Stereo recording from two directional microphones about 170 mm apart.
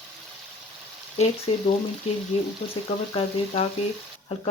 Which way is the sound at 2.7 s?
35° left (ahead or behind).